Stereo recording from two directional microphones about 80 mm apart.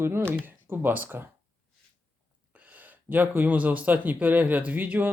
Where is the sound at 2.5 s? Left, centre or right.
Centre.